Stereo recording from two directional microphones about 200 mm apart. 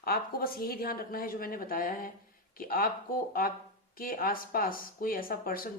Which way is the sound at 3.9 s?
45° left (ahead or behind).